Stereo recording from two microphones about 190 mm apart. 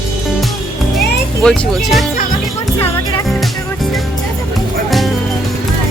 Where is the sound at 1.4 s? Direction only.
5° left (ahead or behind).